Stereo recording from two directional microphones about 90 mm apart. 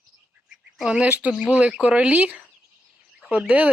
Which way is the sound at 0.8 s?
10° right (ahead or behind).